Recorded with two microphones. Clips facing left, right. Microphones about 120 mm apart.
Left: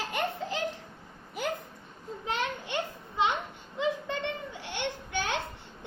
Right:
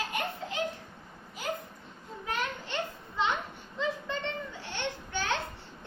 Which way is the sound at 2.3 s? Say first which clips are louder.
Left 2 dB; 15° left (ahead or behind).